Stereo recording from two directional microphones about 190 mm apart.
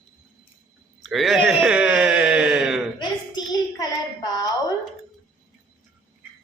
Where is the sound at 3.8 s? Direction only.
20° left (ahead or behind).